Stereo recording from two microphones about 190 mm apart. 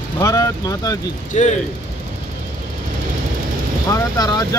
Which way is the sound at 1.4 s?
40° left (ahead or behind).